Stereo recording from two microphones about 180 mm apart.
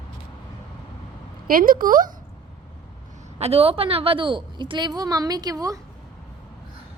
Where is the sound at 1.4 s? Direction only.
50° right (ahead or behind).